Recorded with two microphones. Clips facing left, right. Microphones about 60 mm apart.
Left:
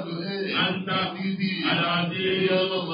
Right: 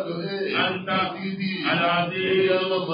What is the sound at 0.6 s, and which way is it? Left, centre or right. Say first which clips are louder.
Speech: right 2 dB; right.